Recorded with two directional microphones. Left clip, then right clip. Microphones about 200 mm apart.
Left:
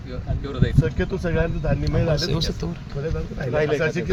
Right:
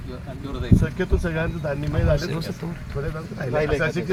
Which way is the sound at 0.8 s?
15° left (ahead or behind).